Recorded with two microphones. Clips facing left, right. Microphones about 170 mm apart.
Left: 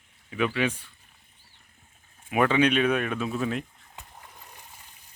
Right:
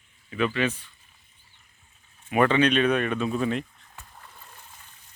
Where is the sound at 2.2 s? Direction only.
10° left (ahead or behind).